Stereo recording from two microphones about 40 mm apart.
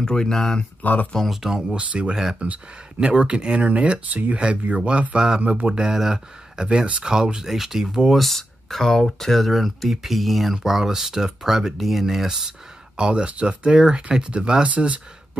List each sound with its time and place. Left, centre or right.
0.0 s speech: centre
0.8 s speech: left
1.3 s speech: centre
1.8 s speech: right
3.1 s speech: right
5.4 s speech: right
5.7 s speech: centre
7.4 s speech: centre
8.2 s speech: centre; by 15.0 s right